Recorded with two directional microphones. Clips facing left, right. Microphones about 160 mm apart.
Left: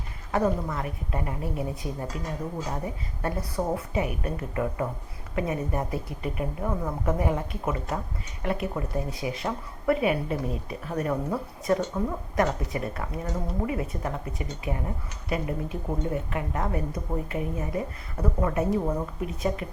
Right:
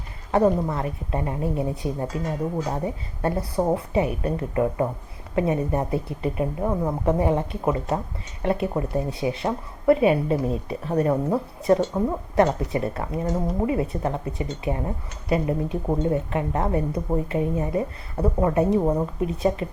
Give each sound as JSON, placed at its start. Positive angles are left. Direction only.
{"t": 0.3, "sound": "speech", "side_deg": -30}